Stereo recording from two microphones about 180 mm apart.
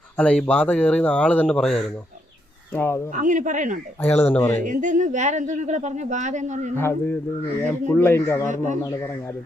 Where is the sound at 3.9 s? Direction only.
10° left (ahead or behind).